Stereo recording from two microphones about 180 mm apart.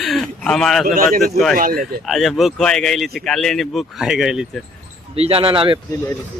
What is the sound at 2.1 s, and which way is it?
Speech, centre (ahead or behind).